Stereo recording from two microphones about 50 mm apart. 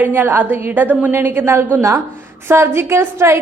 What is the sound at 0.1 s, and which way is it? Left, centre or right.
A woman's voice, right.